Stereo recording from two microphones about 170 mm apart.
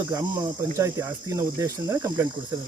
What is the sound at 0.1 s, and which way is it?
Speech, 20° right (ahead or behind).